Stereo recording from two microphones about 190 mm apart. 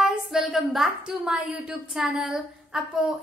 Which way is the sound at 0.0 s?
5° right (ahead or behind).